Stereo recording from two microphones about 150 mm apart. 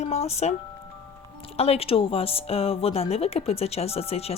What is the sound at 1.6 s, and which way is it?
Speech, 40° left (ahead or behind).